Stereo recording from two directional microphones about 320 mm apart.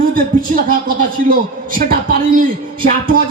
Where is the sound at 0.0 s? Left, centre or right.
Right.